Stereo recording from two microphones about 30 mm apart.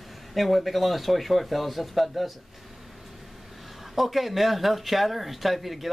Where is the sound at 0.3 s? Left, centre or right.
Centre.